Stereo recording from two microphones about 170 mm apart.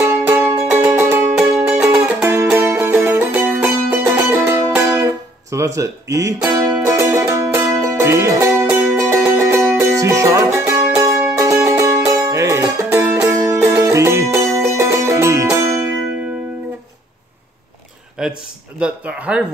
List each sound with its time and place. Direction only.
0.0 s music: 15° right (ahead or behind)
1.3 s music: 5° right (ahead or behind)
1.9 s music: 15° right (ahead or behind)
5.8 s speech: 20° right (ahead or behind)
6.5 s music: 15° right (ahead or behind)
18.2 s a sound: 5° right (ahead or behind)
18.8 s speech: 5° right (ahead or behind)